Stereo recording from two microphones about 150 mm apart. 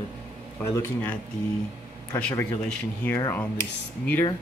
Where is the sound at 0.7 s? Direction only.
15° left (ahead or behind).